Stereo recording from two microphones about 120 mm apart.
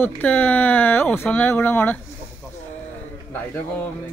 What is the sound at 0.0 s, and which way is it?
Speech, 15° left (ahead or behind).